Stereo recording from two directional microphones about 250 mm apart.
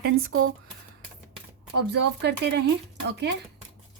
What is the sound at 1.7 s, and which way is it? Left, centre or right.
Speech, right.